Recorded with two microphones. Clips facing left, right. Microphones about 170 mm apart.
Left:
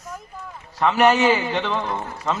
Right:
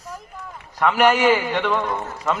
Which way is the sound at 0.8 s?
25° left (ahead or behind).